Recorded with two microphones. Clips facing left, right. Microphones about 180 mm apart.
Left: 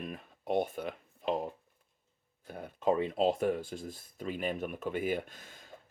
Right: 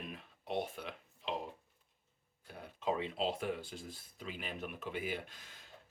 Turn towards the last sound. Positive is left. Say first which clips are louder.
# left 8 dB
turn(degrees=50)  # may be behind; listen again after turning